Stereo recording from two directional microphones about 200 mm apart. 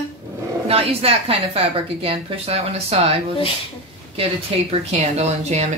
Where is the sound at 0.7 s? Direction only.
30° right (ahead or behind).